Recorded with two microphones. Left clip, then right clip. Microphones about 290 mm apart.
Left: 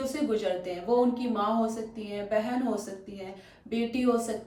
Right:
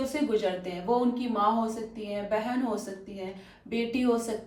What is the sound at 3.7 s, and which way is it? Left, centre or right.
Speech, centre.